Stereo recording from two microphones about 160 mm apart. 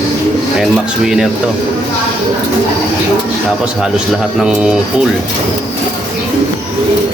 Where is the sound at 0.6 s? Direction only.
Centre (ahead or behind).